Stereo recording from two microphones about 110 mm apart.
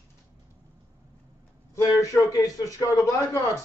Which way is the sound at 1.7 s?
30° left (ahead or behind).